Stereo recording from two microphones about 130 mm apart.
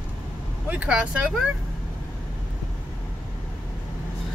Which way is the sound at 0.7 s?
10° right (ahead or behind).